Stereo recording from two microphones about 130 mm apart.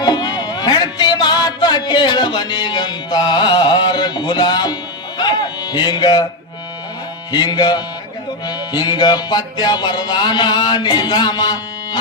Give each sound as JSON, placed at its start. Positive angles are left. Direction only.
{"t": 0.0, "sound": "music", "side_deg": 30}
{"t": 7.3, "sound": "music", "side_deg": 35}